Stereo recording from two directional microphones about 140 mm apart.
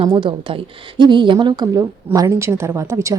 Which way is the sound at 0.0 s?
35° right (ahead or behind).